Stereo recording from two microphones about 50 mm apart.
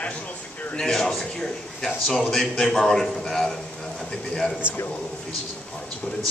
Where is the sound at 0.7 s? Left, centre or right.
Centre.